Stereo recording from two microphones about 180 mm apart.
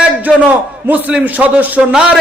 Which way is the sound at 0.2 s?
10° right (ahead or behind).